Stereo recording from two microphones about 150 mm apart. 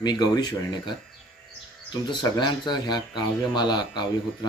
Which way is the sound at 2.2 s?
30° left (ahead or behind).